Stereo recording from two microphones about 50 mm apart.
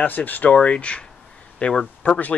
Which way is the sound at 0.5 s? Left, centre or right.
Left.